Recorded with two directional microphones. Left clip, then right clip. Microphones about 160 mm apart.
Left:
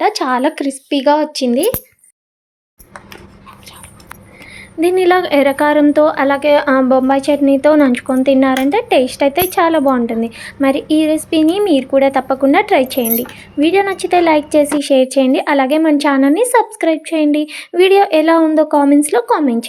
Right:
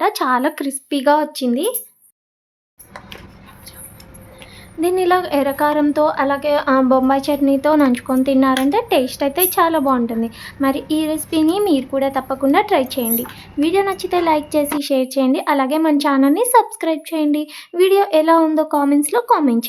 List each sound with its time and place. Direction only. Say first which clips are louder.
0.0 s speech: left 3 dB; 5° left (ahead or behind)
4.5 s speech: left 5 dB; 15° left (ahead or behind)
11.9 s speech: left 7 dB; 20° left (ahead or behind)